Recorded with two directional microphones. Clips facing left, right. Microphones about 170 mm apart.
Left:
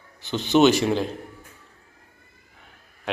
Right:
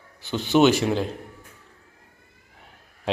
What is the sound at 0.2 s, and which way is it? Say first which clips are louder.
Speech: left 1 dB; 10° right (ahead or behind).